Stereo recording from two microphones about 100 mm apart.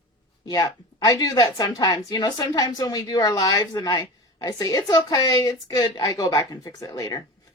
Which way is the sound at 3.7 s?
55° left (ahead or behind).